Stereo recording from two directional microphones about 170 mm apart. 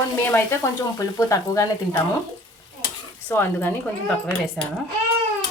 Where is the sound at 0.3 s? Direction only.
15° left (ahead or behind).